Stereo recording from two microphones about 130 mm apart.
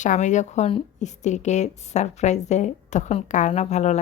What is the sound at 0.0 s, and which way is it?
A woman's voice, 70° left (ahead or behind).